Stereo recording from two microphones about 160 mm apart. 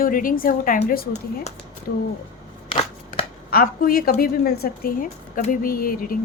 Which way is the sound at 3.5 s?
70° left (ahead or behind).